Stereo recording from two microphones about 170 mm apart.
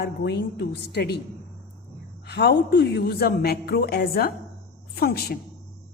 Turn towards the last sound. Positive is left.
turn(degrees=65)  # may be behind; listen again after turning